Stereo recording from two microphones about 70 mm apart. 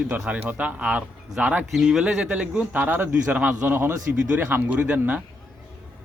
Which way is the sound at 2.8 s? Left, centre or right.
Right.